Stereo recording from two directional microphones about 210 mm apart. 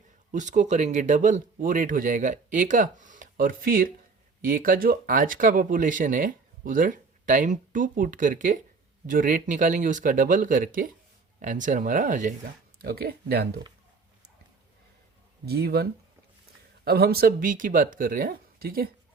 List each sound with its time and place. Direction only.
0.3 s speech: 35° right (ahead or behind)
15.4 s speech: 50° right (ahead or behind)